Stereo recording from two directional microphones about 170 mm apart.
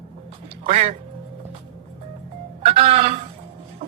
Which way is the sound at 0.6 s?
35° right (ahead or behind).